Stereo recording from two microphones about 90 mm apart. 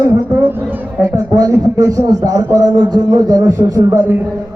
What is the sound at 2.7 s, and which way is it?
Speech, 60° right (ahead or behind).